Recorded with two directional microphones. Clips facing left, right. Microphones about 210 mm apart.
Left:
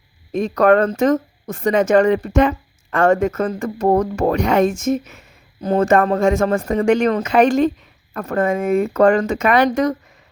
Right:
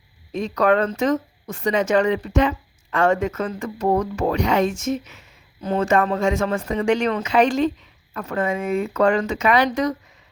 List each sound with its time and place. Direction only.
0.3 s speech: 50° left (ahead or behind)